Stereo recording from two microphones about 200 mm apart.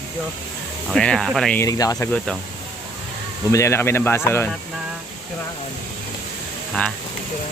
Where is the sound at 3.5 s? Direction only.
15° left (ahead or behind).